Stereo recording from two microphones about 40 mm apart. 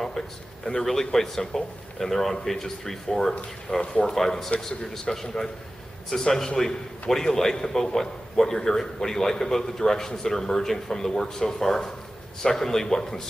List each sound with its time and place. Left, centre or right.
0.7 s a man's voice: centre
3.8 s speech: left
4.1 s a man's voice: centre